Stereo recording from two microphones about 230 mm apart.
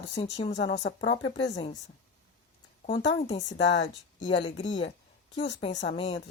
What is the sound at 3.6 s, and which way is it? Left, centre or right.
Speech, left.